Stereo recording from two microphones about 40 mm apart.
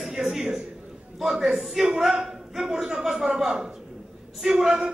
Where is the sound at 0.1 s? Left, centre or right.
Centre.